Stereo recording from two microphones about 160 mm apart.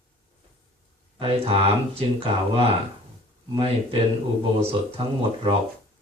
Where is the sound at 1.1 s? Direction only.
35° right (ahead or behind).